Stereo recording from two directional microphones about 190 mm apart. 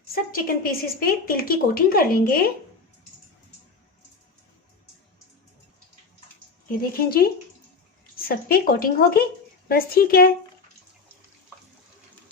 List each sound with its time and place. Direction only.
0.1 s a woman's voice: 50° left (ahead or behind)
6.7 s a woman's voice: 50° left (ahead or behind)